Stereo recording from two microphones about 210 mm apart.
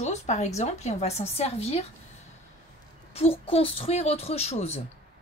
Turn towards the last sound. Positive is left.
turn(degrees=30)  # may be behind; listen again after turning